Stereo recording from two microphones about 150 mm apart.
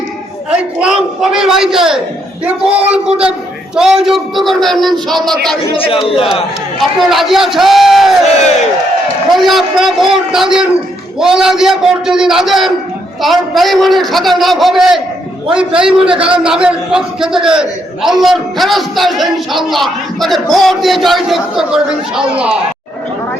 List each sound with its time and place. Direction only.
0.8 s a man's voice: 5° right (ahead or behind)
5.7 s speech: 40° left (ahead or behind)
7.1 s a man's voice: centre (ahead or behind)
9.4 s a man's voice: centre (ahead or behind)